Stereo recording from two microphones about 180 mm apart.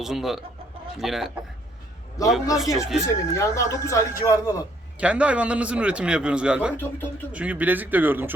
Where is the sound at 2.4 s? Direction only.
20° left (ahead or behind).